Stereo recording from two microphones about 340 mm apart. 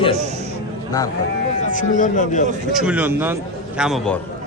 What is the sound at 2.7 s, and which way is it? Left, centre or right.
A man's voice, centre.